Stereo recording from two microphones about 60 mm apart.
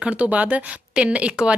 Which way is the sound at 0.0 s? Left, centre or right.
Right.